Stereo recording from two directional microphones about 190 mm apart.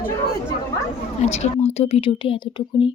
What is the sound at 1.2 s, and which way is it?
A woman's voice, 35° left (ahead or behind).